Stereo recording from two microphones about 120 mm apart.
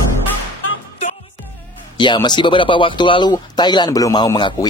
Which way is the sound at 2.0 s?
40° left (ahead or behind).